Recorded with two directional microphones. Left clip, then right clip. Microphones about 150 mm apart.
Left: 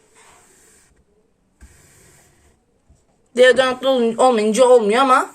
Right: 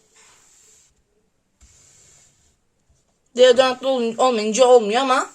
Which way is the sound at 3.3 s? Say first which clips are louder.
Left 1 dB; centre (ahead or behind).